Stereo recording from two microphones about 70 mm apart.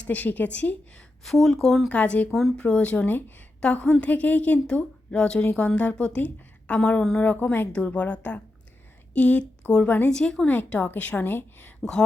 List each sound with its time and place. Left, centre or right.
0.0 s a woman's voice: left
1.2 s speech: centre
1.9 s a woman's voice: centre
3.6 s a woman's voice: centre
4.6 s a woman's voice: centre
10.4 s a woman's voice: left
11.8 s a woman's voice: centre